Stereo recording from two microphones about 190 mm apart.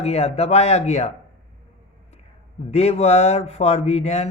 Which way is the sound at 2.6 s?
35° left (ahead or behind).